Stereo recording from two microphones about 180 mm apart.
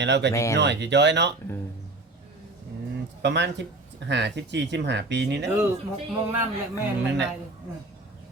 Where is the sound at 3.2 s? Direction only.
75° right (ahead or behind).